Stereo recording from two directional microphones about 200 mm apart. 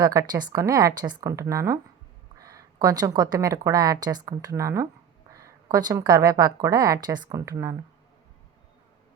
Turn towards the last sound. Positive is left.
turn(degrees=-15)  # may be behind; listen again after turning